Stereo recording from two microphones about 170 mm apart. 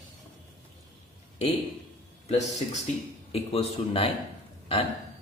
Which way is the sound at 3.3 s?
35° left (ahead or behind).